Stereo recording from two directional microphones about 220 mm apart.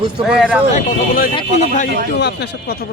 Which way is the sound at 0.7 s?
40° left (ahead or behind).